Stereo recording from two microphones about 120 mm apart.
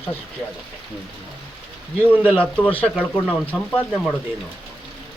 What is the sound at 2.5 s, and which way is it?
Speech, 10° left (ahead or behind).